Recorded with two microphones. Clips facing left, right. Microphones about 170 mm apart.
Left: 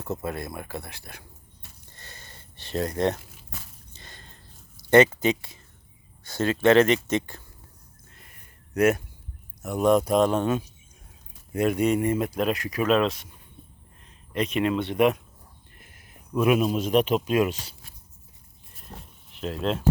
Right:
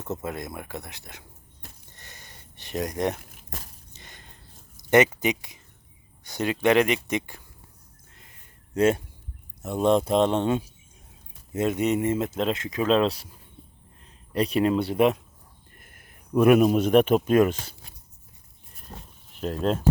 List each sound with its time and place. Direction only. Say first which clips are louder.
0.2 s speech: left 1 dB; 15° right (ahead or behind)
1.9 s a sound: left 1 dB; 15° right (ahead or behind)
4.8 s speech: left 2 dB; 15° right (ahead or behind)
8.1 s a sound: even; 20° right (ahead or behind)
9.6 s speech: left 1 dB; 25° right (ahead or behind)
14.3 s speech: right 2 dB; 35° right (ahead or behind)
15.8 s speech: left 4 dB; 50° right (ahead or behind)
19.5 s speech: right 2 dB; 45° right (ahead or behind)